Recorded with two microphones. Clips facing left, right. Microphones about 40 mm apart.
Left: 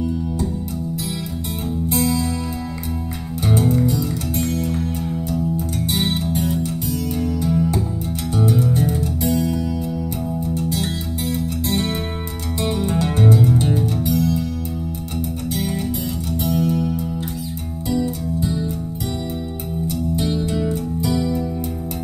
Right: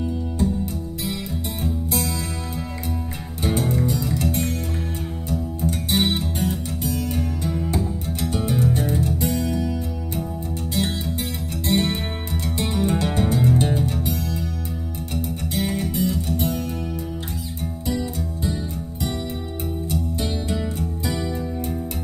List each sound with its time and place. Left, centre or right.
1.9 s music: left
3.8 s music: right
7.2 s music: right
13.3 s music: right
16.3 s music: right
21.0 s music: right